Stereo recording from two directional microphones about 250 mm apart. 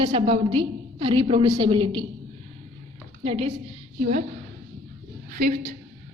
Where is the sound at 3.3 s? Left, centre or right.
Right.